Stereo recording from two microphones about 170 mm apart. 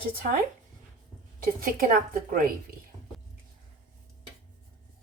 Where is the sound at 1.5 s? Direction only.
55° right (ahead or behind).